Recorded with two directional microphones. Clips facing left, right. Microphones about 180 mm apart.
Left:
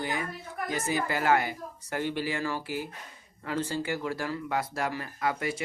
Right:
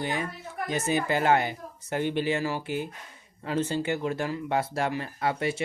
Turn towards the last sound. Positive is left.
turn(degrees=-25)  # may be behind; listen again after turning